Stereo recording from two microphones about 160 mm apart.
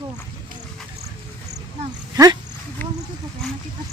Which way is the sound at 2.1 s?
20° right (ahead or behind).